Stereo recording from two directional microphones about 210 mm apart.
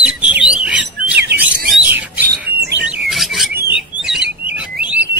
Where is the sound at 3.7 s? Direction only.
5° right (ahead or behind).